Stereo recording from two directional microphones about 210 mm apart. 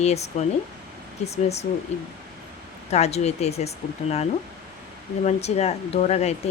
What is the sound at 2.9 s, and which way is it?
Speech, 30° left (ahead or behind).